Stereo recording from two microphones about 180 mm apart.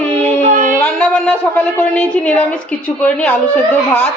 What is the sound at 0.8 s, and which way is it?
A woman's voice, 5° left (ahead or behind).